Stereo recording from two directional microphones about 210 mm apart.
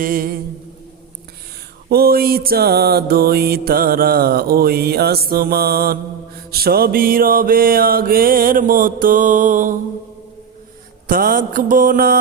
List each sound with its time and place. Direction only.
0.0 s mantra: 45° right (ahead or behind)
1.9 s mantra: 45° right (ahead or behind)
11.1 s mantra: 45° right (ahead or behind)